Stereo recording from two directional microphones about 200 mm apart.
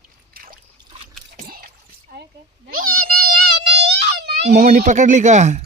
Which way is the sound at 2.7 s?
45° right (ahead or behind).